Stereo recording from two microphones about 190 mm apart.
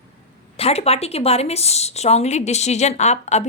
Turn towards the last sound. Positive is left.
turn(degrees=35)  # may be behind; listen again after turning